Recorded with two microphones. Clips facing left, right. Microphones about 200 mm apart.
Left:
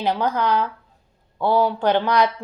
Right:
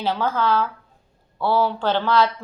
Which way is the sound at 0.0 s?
15° left (ahead or behind).